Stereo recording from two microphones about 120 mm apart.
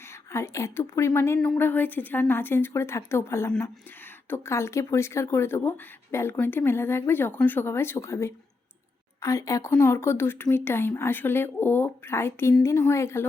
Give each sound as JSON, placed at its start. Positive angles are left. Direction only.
{"t": 0.3, "sound": "speech", "side_deg": 25}